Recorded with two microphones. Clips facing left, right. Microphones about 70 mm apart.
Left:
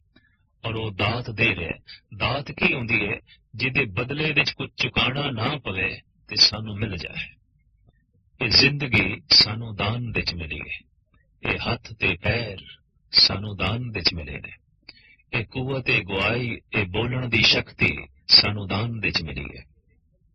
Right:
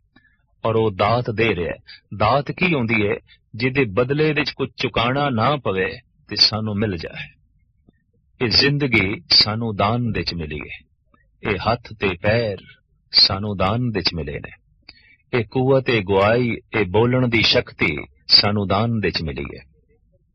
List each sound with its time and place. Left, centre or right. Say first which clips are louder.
0.6 s speech: right 10 dB; right
6.6 s speech: right 9 dB; right
7.1 s speech: right 2 dB; right
8.4 s speech: right 5 dB; right